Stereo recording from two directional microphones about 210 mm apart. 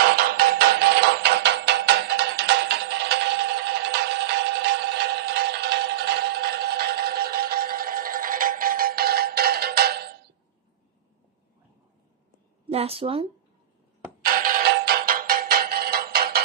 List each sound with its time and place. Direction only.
0.0 s music: 45° right (ahead or behind)
12.6 s a woman's voice: 30° right (ahead or behind)
14.2 s music: 40° right (ahead or behind)